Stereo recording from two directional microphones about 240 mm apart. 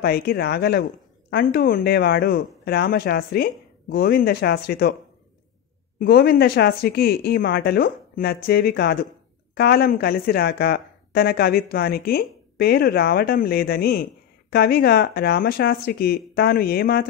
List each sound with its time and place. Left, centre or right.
0.0 s speech: left
5.9 s speech: left